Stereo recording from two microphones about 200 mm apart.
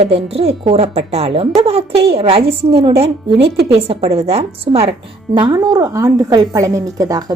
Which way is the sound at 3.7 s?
30° right (ahead or behind).